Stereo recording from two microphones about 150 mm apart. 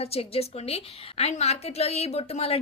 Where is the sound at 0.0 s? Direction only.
40° left (ahead or behind).